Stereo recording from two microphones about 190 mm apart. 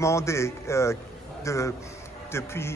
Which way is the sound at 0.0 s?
15° left (ahead or behind).